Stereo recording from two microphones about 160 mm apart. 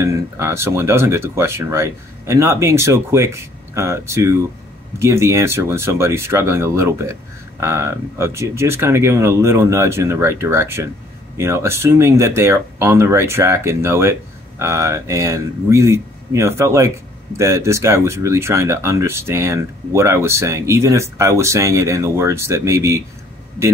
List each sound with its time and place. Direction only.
0.0 s speech: 15° right (ahead or behind)